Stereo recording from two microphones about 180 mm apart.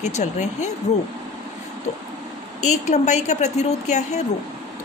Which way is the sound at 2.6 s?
40° left (ahead or behind).